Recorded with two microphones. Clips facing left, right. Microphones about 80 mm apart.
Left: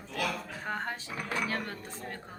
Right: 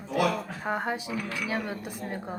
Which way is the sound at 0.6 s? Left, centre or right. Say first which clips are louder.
Right 6 dB; centre.